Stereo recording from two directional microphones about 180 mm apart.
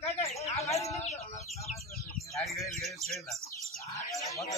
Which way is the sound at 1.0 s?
35° left (ahead or behind).